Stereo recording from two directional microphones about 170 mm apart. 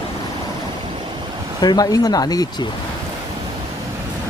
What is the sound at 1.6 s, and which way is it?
Speech, 25° left (ahead or behind).